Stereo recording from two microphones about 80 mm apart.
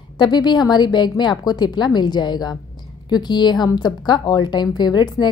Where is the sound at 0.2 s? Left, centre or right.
Left.